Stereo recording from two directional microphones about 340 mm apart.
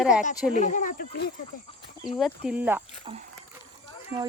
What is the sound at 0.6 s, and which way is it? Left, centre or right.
Speech, left.